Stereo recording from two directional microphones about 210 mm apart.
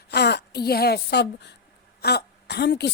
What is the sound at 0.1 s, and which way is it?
A woman's voice, 50° left (ahead or behind).